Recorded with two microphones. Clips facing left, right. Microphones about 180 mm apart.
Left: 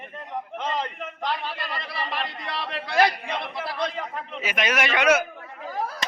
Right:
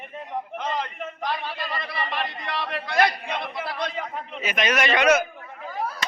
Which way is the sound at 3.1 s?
Centre (ahead or behind).